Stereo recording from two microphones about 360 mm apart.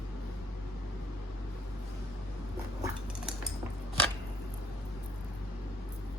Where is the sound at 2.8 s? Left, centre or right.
Centre.